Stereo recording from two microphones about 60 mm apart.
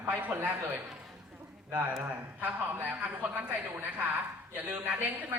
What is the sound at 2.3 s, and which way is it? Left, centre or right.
A man's voice, right.